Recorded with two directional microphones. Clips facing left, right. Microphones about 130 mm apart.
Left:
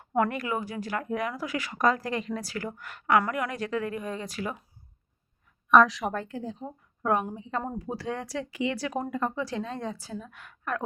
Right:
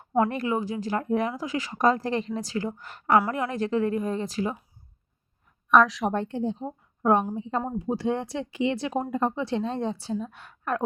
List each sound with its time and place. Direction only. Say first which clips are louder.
0.2 s speech: right 3 dB; 30° right (ahead or behind)
5.6 s a woman's voice: even; centre (ahead or behind)
6.1 s speech: right 6 dB; 30° right (ahead or behind)